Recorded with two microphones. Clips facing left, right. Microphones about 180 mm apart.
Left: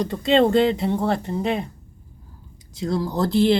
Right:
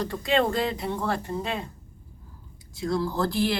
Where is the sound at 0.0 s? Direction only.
20° left (ahead or behind).